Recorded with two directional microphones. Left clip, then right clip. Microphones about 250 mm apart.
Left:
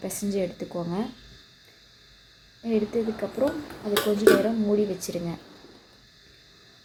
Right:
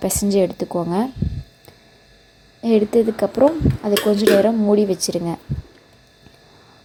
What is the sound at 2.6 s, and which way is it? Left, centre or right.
Speech, right.